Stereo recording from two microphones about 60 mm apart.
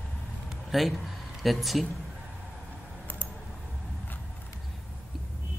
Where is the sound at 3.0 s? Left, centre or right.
Left.